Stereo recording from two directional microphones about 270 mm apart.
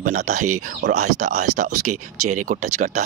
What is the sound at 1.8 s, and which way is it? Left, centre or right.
Speech, right.